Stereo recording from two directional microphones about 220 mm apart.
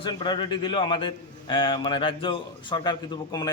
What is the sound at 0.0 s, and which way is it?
A man's voice, 20° left (ahead or behind).